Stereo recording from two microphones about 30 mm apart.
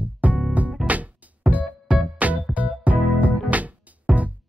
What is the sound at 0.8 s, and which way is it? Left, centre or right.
Music, right.